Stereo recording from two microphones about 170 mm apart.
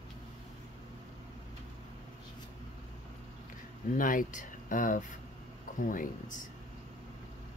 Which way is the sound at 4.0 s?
50° left (ahead or behind).